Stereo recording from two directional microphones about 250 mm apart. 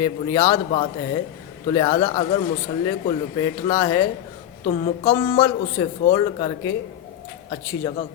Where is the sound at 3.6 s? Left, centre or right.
Centre.